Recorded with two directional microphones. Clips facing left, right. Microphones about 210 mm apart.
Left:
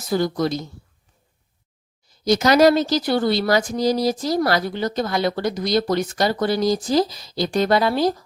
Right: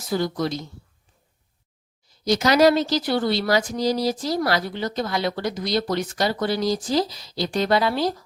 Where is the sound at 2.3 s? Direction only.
45° left (ahead or behind).